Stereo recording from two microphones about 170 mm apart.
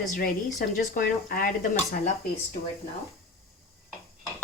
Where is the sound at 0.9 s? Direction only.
55° left (ahead or behind).